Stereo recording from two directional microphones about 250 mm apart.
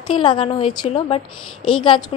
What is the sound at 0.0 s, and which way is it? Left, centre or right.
A woman's voice, centre.